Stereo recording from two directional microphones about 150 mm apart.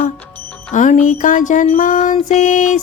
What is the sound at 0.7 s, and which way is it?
Music, 55° left (ahead or behind).